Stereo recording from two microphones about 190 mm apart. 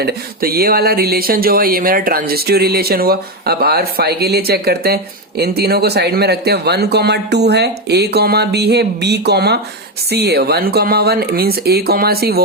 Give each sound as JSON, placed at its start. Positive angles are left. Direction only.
{"t": 0.0, "sound": "speech", "side_deg": -55}